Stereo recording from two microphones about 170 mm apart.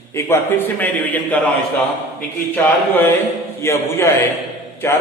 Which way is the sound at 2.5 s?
10° left (ahead or behind).